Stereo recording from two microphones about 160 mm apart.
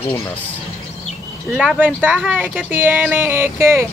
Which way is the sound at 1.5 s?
10° right (ahead or behind).